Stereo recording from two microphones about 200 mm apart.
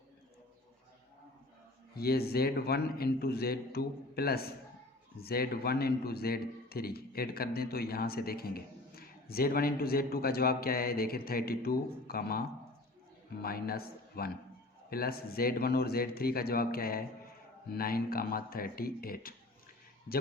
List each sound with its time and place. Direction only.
2.0 s a man's voice: 50° left (ahead or behind)